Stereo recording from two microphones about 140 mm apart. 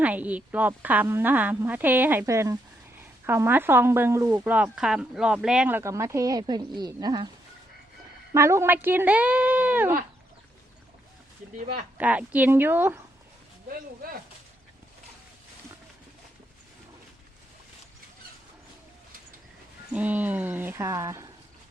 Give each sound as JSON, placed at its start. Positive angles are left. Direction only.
{"t": 0.0, "sound": "speech", "side_deg": -10}
{"t": 8.3, "sound": "speech", "side_deg": -20}
{"t": 11.9, "sound": "speech", "side_deg": -10}
{"t": 19.9, "sound": "speech", "side_deg": -10}